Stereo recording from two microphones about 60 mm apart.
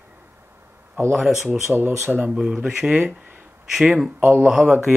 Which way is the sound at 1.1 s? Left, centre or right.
Centre.